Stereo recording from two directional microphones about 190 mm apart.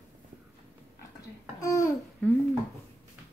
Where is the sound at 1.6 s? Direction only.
15° left (ahead or behind).